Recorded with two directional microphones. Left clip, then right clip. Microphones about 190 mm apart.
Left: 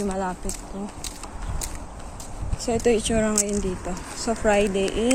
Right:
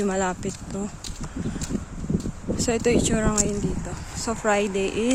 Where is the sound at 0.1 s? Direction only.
90° right.